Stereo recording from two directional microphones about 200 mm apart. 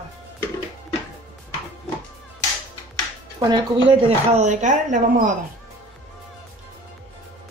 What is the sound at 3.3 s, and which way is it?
Speech, 20° right (ahead or behind).